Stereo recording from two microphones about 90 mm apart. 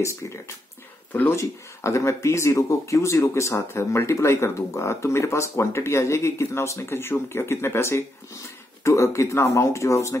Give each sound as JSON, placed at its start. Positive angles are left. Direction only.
{"t": 0.0, "sound": "speech", "side_deg": 35}